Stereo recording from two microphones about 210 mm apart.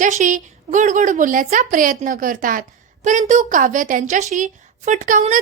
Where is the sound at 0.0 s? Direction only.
35° right (ahead or behind).